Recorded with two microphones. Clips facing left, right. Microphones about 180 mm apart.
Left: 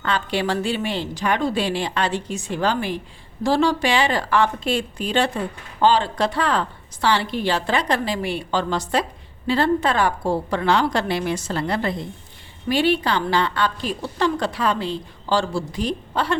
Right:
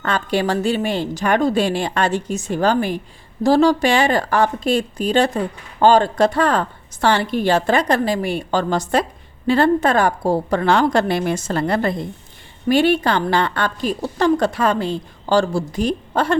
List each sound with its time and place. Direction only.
0.0 s a woman's voice: 45° right (ahead or behind)